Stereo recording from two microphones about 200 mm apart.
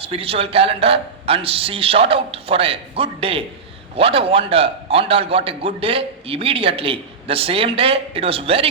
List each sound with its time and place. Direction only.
0.0 s a man's voice: 30° right (ahead or behind)